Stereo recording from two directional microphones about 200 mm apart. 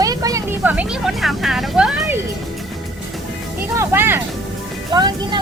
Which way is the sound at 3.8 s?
10° right (ahead or behind).